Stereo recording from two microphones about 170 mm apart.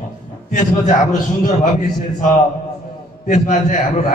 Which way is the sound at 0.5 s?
45° left (ahead or behind).